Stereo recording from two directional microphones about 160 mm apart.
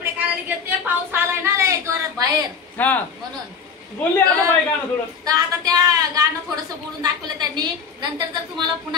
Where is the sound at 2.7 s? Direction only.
10° left (ahead or behind).